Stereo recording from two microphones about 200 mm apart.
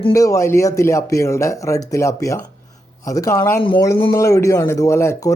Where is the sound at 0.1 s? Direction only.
15° left (ahead or behind).